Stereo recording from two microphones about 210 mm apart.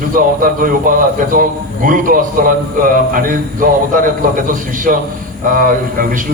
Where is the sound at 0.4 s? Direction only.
40° right (ahead or behind).